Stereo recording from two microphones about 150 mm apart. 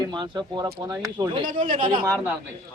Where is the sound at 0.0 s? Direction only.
30° right (ahead or behind).